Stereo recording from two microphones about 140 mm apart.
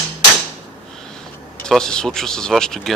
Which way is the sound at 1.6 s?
5° left (ahead or behind).